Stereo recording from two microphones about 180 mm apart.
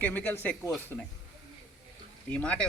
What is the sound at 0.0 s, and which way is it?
Speech, 10° left (ahead or behind).